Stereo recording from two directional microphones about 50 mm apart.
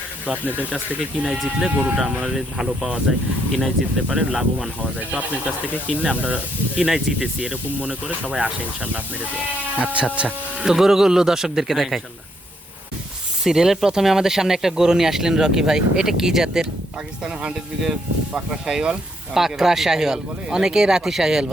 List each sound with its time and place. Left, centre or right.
0.3 s speech: right
1.2 s speech: centre
4.8 s speech: right
6.2 s speech: right
6.8 s speech: centre
10.7 s speech: centre
13.4 s speech: centre